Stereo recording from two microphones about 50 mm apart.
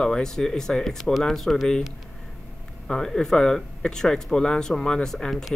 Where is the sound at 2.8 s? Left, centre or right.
Centre.